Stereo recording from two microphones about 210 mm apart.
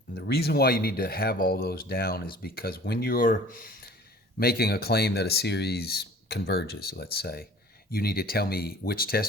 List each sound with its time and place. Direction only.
0.1 s speech: 50° left (ahead or behind)